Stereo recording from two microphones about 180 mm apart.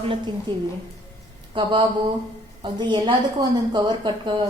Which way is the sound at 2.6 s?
25° right (ahead or behind).